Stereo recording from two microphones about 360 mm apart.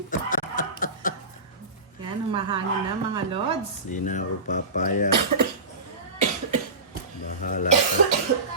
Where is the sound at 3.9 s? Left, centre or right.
Left.